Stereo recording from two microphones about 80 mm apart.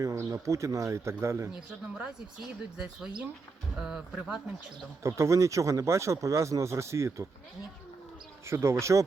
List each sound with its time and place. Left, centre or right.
0.0 s speech: right
1.5 s speech: centre
5.0 s speech: right
8.4 s speech: right